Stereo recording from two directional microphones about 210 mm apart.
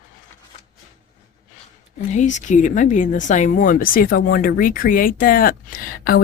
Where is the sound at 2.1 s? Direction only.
35° left (ahead or behind).